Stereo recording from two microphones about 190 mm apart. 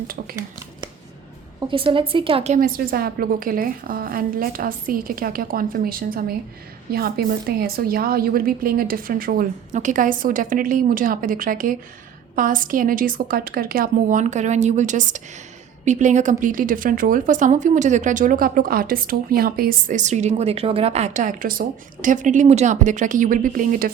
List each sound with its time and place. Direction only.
1.5 s a woman's voice: 30° right (ahead or behind); by 23.9 s 45° right (ahead or behind)